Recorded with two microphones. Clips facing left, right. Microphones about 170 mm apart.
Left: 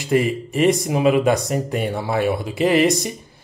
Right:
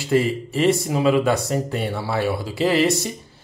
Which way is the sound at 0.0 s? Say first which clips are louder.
Left 1 dB; 15° left (ahead or behind).